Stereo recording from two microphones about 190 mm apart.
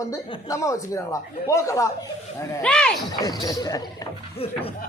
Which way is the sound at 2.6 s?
5° left (ahead or behind).